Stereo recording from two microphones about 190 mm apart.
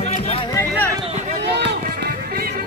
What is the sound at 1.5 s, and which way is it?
Run, 60° right (ahead or behind).